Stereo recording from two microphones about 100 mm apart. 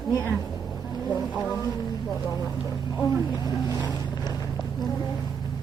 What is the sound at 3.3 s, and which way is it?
Vehicle, 40° left (ahead or behind).